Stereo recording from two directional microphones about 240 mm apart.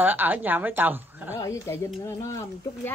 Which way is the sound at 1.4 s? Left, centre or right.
Centre.